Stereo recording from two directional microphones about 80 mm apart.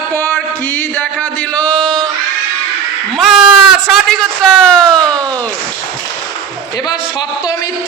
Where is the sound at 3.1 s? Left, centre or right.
Centre.